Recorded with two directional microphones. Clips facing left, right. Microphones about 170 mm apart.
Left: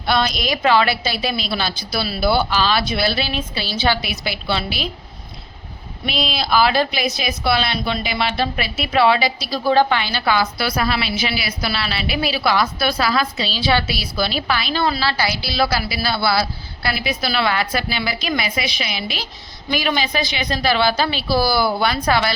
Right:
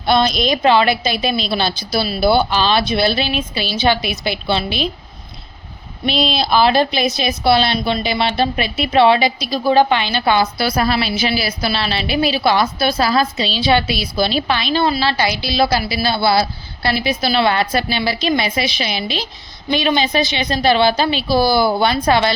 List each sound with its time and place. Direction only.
0.0 s a woman's voice: 25° right (ahead or behind)
6.1 s a woman's voice: 25° right (ahead or behind)
10.8 s a woman's voice: 35° right (ahead or behind)
13.3 s a woman's voice: 20° right (ahead or behind)